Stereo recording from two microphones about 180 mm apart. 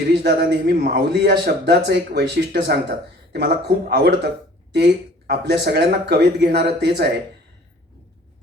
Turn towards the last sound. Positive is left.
turn(degrees=-65)  # may be behind; listen again after turning